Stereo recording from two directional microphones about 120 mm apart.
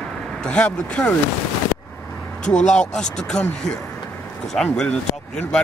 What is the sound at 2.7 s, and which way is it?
Speech, 5° left (ahead or behind).